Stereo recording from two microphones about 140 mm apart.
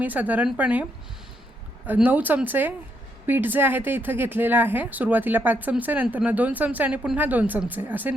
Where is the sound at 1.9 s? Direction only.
15° right (ahead or behind).